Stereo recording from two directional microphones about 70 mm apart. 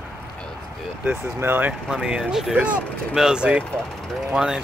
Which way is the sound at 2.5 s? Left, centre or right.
Centre.